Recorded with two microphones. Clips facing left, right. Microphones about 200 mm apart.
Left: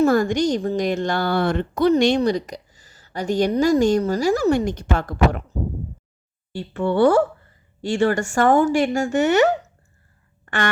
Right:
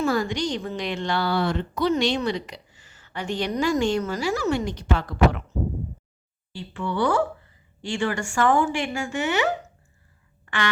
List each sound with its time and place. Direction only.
0.0 s a woman's voice: 45° left (ahead or behind)
6.6 s speech: 50° left (ahead or behind)
7.1 s a woman's voice: 40° left (ahead or behind)
10.4 s a sound: 45° left (ahead or behind)